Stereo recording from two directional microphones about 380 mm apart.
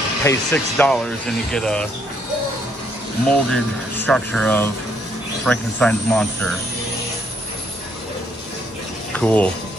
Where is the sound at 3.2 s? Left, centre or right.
Centre.